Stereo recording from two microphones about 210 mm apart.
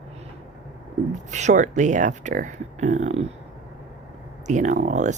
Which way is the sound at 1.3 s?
35° right (ahead or behind).